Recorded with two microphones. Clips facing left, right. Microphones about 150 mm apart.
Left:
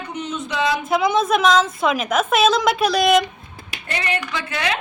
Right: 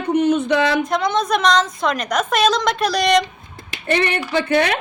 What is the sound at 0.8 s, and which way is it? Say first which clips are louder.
A woman's voice: left 1 dB; 5° left (ahead or behind).